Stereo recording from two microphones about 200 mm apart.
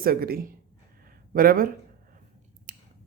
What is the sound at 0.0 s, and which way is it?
Speech, 50° right (ahead or behind).